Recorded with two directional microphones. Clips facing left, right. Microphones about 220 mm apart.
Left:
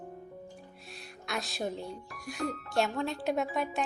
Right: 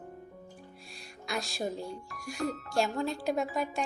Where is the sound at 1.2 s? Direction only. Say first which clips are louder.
Right 1 dB; centre (ahead or behind).